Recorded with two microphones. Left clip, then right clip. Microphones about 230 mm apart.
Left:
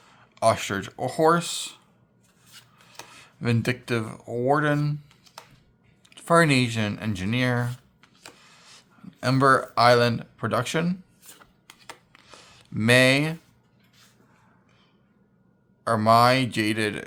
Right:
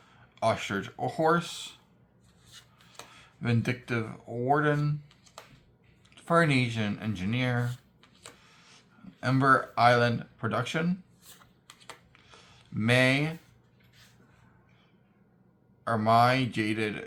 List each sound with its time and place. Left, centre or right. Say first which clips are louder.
0.1 s speech: left 6 dB; left
3.1 s speech: left 5 dB; left
6.1 s speech: left 5 dB; left
8.4 s a sound: left 5 dB; left
9.2 s speech: left 4 dB; left
12.1 s a sound: left 5 dB; left
15.8 s speech: left 5 dB; left